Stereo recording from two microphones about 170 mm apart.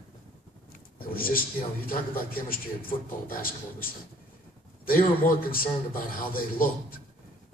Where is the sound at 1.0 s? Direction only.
60° left (ahead or behind).